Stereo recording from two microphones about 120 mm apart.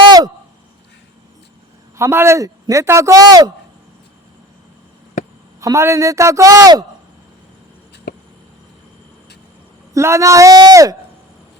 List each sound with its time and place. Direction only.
2.0 s speech: 20° right (ahead or behind)
5.5 s speech: 25° right (ahead or behind)
9.9 s speech: 25° right (ahead or behind)